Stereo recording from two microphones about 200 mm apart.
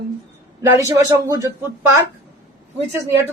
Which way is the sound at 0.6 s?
15° right (ahead or behind).